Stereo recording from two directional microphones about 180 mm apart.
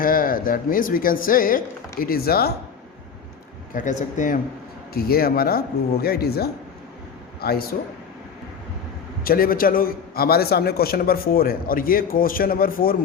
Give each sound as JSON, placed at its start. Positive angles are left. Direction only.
{"t": 0.0, "sound": "speech", "side_deg": 50}
{"t": 3.7, "sound": "a man's voice", "side_deg": 45}
{"t": 4.9, "sound": "speech", "side_deg": 55}
{"t": 9.2, "sound": "a man's voice", "side_deg": 55}